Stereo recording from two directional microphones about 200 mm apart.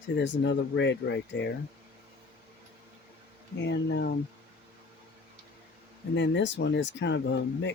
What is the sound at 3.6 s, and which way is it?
Speech, 60° left (ahead or behind).